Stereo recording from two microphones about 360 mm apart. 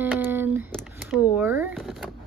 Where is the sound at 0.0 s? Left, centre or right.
Centre.